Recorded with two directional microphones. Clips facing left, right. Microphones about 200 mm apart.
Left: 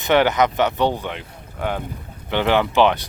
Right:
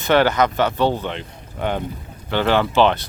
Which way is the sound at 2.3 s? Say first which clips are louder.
Even; 15° left (ahead or behind).